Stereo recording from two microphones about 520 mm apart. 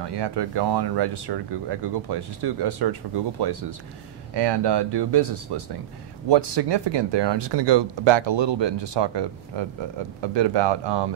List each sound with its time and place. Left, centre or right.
0.0 s speech: right